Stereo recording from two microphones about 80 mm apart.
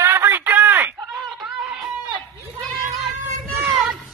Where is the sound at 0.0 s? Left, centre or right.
Right.